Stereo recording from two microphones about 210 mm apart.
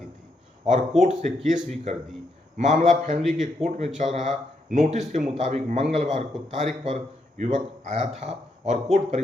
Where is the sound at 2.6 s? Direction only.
35° right (ahead or behind).